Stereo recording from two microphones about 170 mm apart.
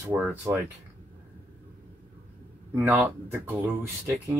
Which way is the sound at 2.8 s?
10° right (ahead or behind).